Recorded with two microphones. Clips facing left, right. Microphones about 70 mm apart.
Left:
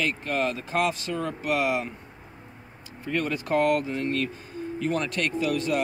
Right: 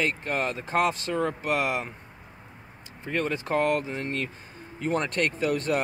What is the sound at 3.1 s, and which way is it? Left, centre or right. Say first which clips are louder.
Speech: left 1 dB; right.